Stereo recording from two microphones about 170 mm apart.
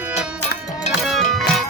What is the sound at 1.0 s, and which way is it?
Music, centre (ahead or behind).